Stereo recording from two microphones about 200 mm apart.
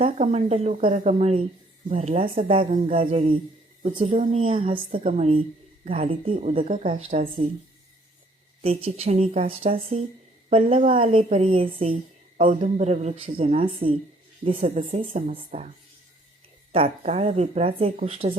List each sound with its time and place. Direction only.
0.0 s a woman's voice: 35° right (ahead or behind)
5.9 s speech: 25° right (ahead or behind)
8.6 s speech: 30° right (ahead or behind)
16.7 s speech: 30° right (ahead or behind)